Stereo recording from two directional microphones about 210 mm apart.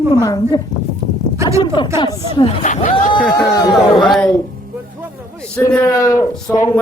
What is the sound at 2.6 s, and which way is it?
Speech, 40° left (ahead or behind).